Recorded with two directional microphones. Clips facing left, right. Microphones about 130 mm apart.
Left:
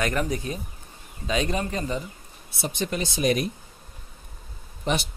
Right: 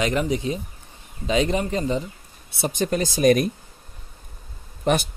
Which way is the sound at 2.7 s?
45° right (ahead or behind).